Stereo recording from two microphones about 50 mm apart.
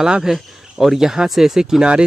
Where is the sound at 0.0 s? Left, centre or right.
Centre.